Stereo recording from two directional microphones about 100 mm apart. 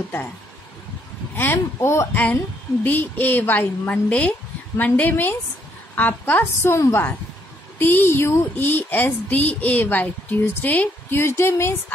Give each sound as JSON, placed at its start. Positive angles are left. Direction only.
{"t": 1.3, "sound": "a woman's voice", "side_deg": 20}